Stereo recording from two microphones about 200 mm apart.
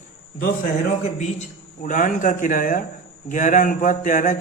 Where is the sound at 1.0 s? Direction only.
35° left (ahead or behind).